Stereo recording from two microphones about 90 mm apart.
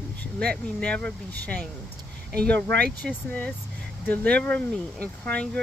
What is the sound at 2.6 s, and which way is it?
Speech, 5° left (ahead or behind).